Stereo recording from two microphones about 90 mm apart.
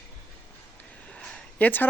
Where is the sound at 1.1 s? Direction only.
15° left (ahead or behind).